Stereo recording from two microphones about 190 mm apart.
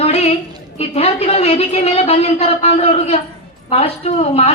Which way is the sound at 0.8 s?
30° left (ahead or behind).